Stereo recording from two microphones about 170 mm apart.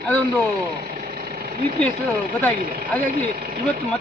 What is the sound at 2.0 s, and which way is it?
Speech, 60° right (ahead or behind).